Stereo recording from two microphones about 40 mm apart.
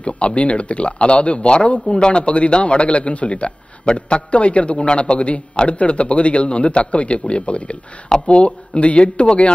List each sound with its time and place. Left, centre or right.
0.0 s speech: left